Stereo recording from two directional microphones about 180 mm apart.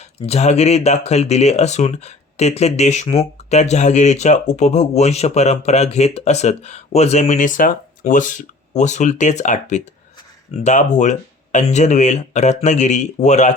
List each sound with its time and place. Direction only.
0.0 s speech: 35° left (ahead or behind)